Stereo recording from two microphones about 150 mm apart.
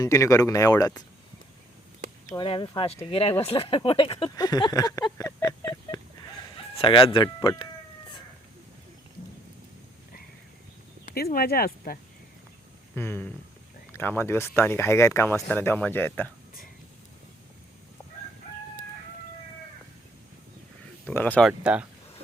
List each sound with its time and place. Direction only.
0.0 s speech: 20° left (ahead or behind)
2.3 s speech: 30° left (ahead or behind)
4.4 s speech: 25° left (ahead or behind)
5.1 s a sound: 20° left (ahead or behind)
6.7 s speech: 35° left (ahead or behind)
11.0 s speech: 75° left (ahead or behind)
13.0 s speech: 15° left (ahead or behind)
21.1 s speech: 10° left (ahead or behind)
21.4 s speech: 10° right (ahead or behind)